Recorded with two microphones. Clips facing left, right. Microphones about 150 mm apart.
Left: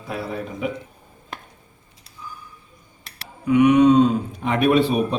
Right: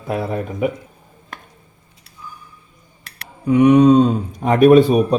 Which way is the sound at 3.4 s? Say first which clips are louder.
Right 3 dB; 35° right (ahead or behind).